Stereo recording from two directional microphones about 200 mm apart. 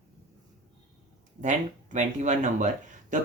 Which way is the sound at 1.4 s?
40° right (ahead or behind).